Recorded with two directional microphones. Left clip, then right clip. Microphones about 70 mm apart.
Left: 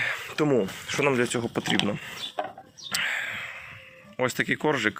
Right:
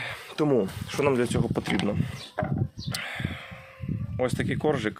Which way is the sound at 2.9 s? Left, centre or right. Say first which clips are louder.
Left 7 dB; right.